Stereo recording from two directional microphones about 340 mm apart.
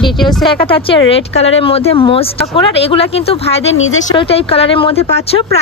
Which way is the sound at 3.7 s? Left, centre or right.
Left.